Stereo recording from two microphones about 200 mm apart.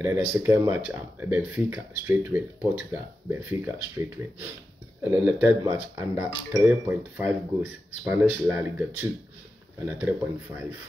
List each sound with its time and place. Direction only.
0.0 s speech: 10° right (ahead or behind)